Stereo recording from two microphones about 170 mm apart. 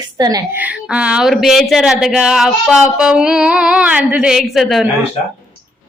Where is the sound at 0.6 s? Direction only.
10° right (ahead or behind).